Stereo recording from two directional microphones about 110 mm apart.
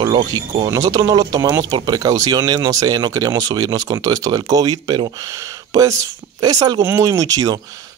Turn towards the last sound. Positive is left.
turn(degrees=-35)  # may be behind; listen again after turning